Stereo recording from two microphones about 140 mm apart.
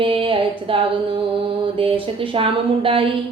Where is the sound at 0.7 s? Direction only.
40° right (ahead or behind).